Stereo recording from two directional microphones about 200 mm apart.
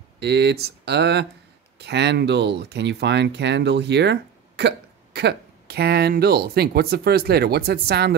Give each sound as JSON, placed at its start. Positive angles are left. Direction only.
{"t": 0.2, "sound": "speech", "side_deg": -55}